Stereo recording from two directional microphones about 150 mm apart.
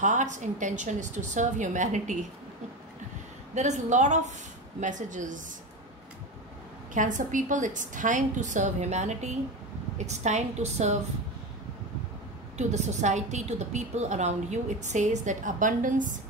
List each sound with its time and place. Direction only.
0.0 s a woman's voice: 55° right (ahead or behind)
3.5 s a woman's voice: 50° right (ahead or behind)
6.9 s a woman's voice: 60° right (ahead or behind)
12.5 s a woman's voice: 50° right (ahead or behind)